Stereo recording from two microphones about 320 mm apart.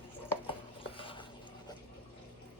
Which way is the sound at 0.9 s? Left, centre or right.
Centre.